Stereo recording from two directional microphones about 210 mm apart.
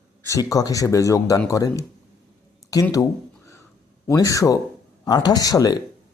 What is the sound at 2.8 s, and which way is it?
Speech, 15° left (ahead or behind).